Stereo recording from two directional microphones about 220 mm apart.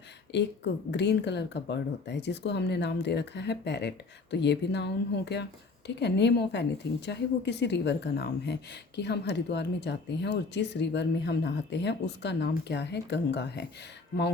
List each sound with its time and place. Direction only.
0.3 s speech: 50° left (ahead or behind)